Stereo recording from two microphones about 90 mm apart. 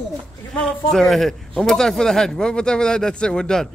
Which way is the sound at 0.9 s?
5° left (ahead or behind).